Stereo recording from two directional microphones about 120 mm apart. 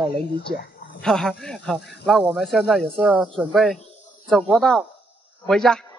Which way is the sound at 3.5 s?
Centre (ahead or behind).